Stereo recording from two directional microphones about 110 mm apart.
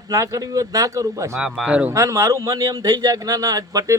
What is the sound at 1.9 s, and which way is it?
Speech, 25° right (ahead or behind).